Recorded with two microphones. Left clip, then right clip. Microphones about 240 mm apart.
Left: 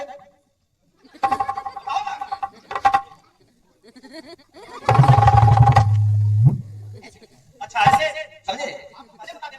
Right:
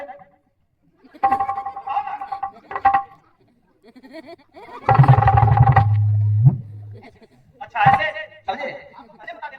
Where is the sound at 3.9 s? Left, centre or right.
Centre.